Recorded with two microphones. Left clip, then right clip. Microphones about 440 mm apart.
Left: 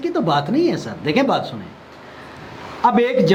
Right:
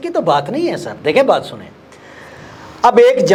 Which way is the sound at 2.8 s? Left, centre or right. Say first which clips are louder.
Right 7 dB; right.